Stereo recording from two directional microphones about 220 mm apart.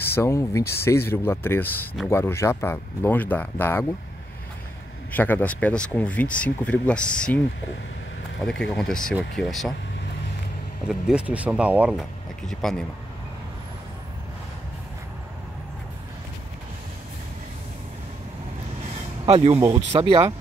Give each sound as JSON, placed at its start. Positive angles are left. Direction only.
{"t": 0.0, "sound": "speech", "side_deg": 10}
{"t": 5.1, "sound": "speech", "side_deg": 10}
{"t": 8.5, "sound": "speech", "side_deg": 5}
{"t": 10.9, "sound": "speech", "side_deg": -5}
{"t": 19.2, "sound": "speech", "side_deg": -25}